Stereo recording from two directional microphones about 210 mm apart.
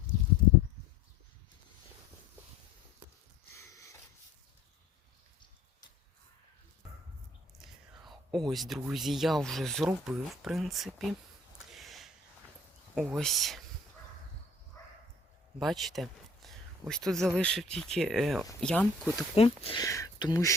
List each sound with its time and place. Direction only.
3.5 s a sound: 15° left (ahead or behind)
7.6 s speech: centre (ahead or behind)
11.7 s a sound: centre (ahead or behind)
13.0 s speech: centre (ahead or behind)
15.5 s speech: centre (ahead or behind)
19.6 s speech: 20° left (ahead or behind)